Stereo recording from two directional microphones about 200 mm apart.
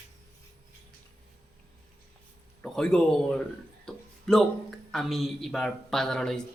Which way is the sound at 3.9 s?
Centre (ahead or behind).